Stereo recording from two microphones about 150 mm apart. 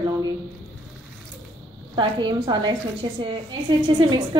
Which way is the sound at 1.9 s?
30° right (ahead or behind).